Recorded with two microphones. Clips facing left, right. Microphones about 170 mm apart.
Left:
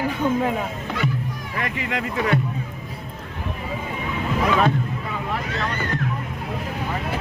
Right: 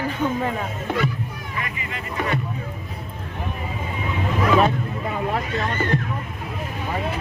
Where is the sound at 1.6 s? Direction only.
90° left.